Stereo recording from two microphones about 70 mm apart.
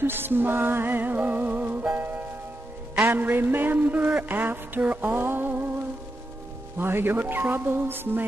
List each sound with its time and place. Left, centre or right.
0.0 s music: right
3.1 s music: right
4.2 s a sound: right
6.8 s speech: right